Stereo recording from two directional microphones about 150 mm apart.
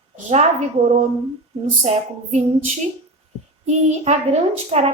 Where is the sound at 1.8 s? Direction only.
45° right (ahead or behind).